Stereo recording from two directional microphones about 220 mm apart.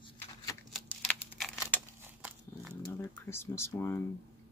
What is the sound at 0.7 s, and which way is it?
Computer keyboard, centre (ahead or behind).